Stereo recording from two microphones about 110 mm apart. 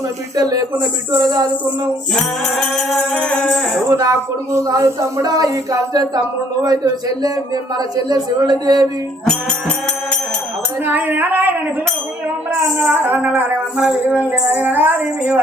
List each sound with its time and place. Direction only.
0.3 s speech: 35° right (ahead or behind)
2.1 s music: centre (ahead or behind)
3.9 s speech: 30° right (ahead or behind)
9.3 s music: 10° left (ahead or behind)
10.8 s music: 15° right (ahead or behind)
12.9 s music: 15° right (ahead or behind)